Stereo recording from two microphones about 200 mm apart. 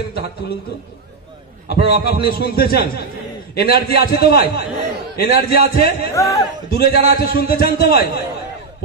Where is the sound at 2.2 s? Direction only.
50° left (ahead or behind).